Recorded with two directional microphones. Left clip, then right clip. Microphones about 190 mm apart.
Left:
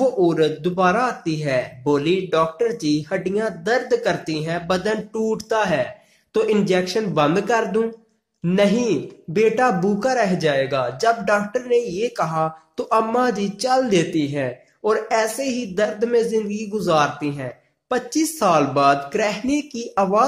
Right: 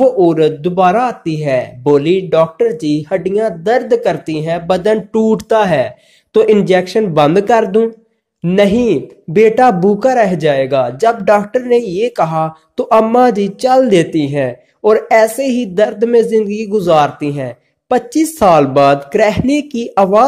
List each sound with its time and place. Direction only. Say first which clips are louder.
0.0 s a man's voice: right 8 dB; 30° right (ahead or behind)